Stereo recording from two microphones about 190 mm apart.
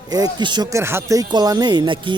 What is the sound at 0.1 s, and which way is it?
Speech, 20° right (ahead or behind).